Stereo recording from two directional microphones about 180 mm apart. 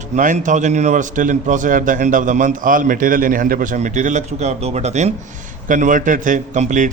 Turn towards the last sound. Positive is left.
turn(degrees=-40)  # may be behind; listen again after turning